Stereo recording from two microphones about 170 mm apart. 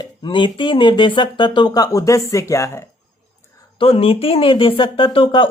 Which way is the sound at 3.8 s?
35° left (ahead or behind).